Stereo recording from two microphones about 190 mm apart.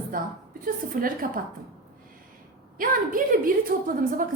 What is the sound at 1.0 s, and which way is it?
Speech, 50° right (ahead or behind).